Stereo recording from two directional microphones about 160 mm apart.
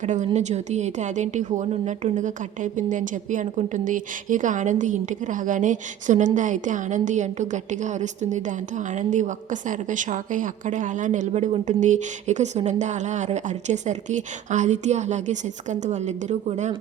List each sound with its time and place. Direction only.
0.0 s a woman's voice: 50° right (ahead or behind)